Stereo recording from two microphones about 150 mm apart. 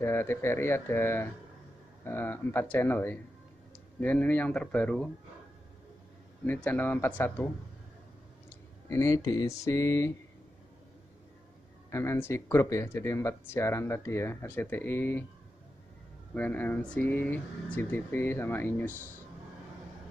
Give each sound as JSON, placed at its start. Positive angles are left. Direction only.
{"t": 0.0, "sound": "speech", "side_deg": 15}
{"t": 6.4, "sound": "speech", "side_deg": 10}
{"t": 8.8, "sound": "speech", "side_deg": 20}
{"t": 11.9, "sound": "speech", "side_deg": 15}
{"t": 16.3, "sound": "speech", "side_deg": 10}